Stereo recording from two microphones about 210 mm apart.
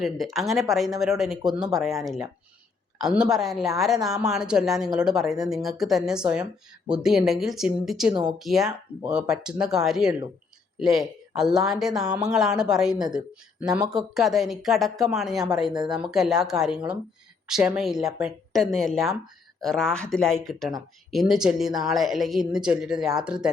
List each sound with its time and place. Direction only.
0.0 s speech: centre (ahead or behind)
8.1 s speech: 20° right (ahead or behind)
8.4 s speech: centre (ahead or behind)
13.7 s speech: 20° right (ahead or behind)
14.1 s speech: centre (ahead or behind)